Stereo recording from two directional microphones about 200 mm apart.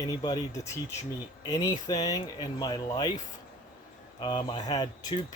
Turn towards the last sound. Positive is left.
turn(degrees=20)  # may be behind; listen again after turning